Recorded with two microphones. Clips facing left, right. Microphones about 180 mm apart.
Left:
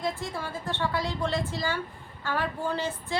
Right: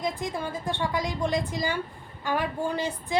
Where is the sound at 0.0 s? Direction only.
15° right (ahead or behind).